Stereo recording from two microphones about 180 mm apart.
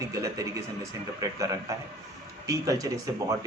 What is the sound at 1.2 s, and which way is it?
A man's voice, 20° right (ahead or behind).